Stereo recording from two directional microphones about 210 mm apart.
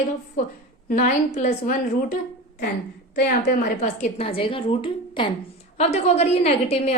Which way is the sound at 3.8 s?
30° left (ahead or behind).